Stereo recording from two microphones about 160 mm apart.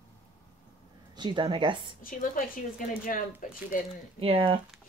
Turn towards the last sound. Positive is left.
turn(degrees=-35)  # may be behind; listen again after turning